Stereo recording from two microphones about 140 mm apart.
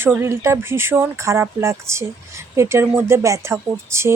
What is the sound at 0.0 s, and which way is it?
Speech, 15° right (ahead or behind).